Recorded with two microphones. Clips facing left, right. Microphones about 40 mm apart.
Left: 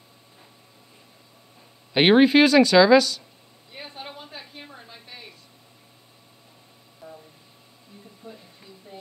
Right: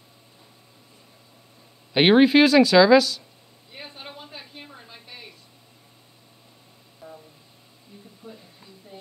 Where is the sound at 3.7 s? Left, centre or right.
Centre.